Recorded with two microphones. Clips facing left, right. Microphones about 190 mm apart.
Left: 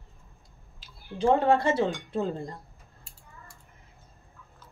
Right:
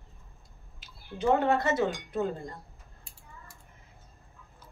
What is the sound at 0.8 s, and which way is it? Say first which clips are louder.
Speech: left 3 dB; 30° left (ahead or behind).